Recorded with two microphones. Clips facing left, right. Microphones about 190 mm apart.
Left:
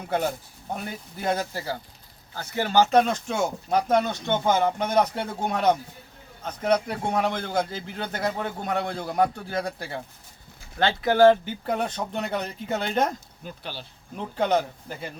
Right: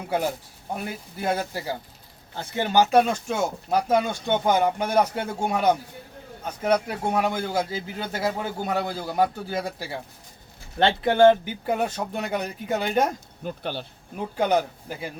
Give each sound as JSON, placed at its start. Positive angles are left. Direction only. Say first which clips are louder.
{"t": 0.7, "sound": "speech", "louder": "right 1 dB", "side_deg": -5}
{"t": 2.3, "sound": "speech", "louder": "even", "side_deg": -25}
{"t": 3.0, "sound": "a man's voice", "louder": "right 1 dB", "side_deg": -5}
{"t": 10.8, "sound": "speech", "louder": "right 1 dB", "side_deg": -25}
{"t": 11.4, "sound": "speech", "louder": "right 2 dB", "side_deg": -10}
{"t": 13.4, "sound": "speech", "louder": "right 9 dB", "side_deg": -50}
{"t": 14.2, "sound": "speech", "louder": "right 1 dB", "side_deg": -10}